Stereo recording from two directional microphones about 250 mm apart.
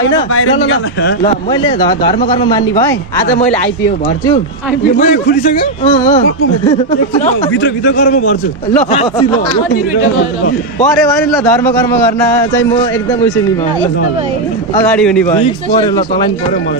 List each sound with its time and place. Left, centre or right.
0.0 s speech: left
1.5 s speech: centre
4.9 s a man's voice: left
8.0 s a man's voice: left
11.0 s a man's voice: centre
14.9 s a man's voice: centre
15.3 s speech: centre